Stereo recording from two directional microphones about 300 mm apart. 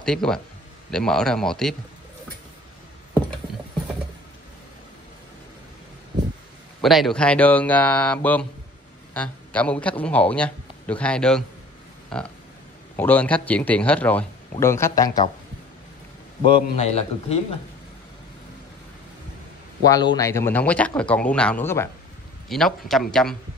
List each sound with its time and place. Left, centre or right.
0.0 s a man's voice: centre
6.8 s a man's voice: centre
16.5 s a man's voice: left
19.8 s a man's voice: centre